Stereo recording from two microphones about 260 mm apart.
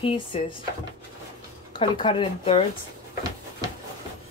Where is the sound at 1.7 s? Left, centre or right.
Centre.